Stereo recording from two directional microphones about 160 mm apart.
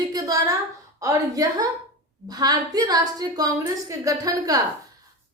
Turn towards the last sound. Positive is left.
turn(degrees=-20)  # may be behind; listen again after turning